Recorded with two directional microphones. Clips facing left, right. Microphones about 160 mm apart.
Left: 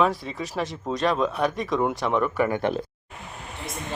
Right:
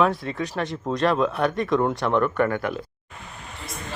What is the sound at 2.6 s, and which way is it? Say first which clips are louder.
Speech: left 3 dB; 30° left (ahead or behind).